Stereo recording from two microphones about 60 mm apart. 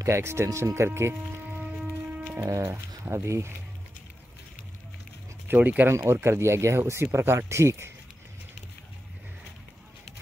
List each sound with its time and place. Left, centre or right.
0.0 s speech: right
2.4 s speech: right
3.1 s speech: right
5.5 s speech: right
5.9 s speech: right